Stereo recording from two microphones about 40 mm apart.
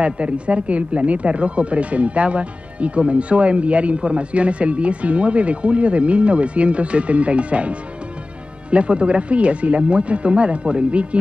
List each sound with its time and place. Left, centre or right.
0.0 s speech: right